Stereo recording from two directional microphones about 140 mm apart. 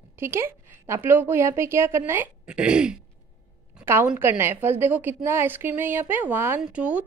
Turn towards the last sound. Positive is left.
turn(degrees=-10)  # may be behind; listen again after turning